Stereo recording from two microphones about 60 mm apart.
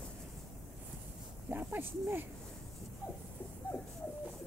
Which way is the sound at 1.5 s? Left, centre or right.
Right.